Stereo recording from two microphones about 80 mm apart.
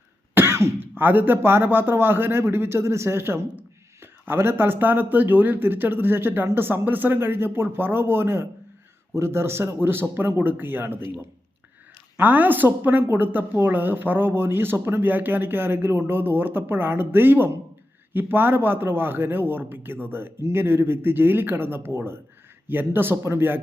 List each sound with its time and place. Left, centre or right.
0.3 s throat clearing: right
0.9 s a woman's voice: right
12.1 s a woman's voice: right